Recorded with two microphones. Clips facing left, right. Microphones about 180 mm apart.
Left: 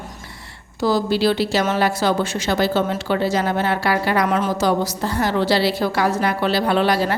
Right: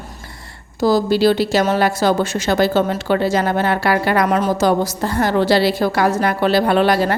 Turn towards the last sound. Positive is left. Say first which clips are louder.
# right 3 dB
turn(degrees=-50)  # may be behind; listen again after turning